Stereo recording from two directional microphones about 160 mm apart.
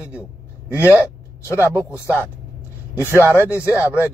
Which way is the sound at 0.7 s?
10° right (ahead or behind).